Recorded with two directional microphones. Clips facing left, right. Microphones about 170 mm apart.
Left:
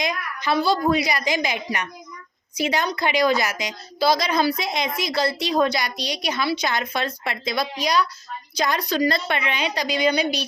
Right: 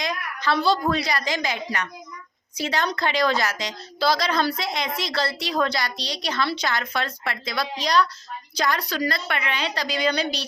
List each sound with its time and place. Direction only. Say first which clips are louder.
0.0 s a woman's voice: left 1 dB; 15° left (ahead or behind)